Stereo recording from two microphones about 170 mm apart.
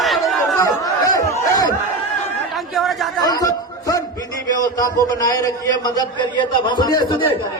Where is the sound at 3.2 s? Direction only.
20° left (ahead or behind).